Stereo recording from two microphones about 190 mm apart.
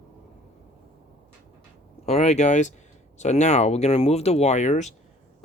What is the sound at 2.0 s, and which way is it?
Speech, 35° left (ahead or behind).